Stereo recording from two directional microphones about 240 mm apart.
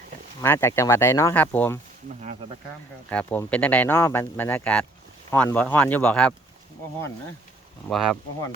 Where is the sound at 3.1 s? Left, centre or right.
Centre.